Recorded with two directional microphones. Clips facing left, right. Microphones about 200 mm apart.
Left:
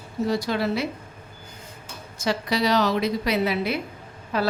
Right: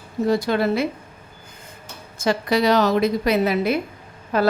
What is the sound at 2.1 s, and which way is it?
A woman's voice, 50° right (ahead or behind).